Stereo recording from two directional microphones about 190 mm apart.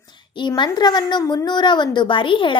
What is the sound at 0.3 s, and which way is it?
A child's voice, 25° left (ahead or behind).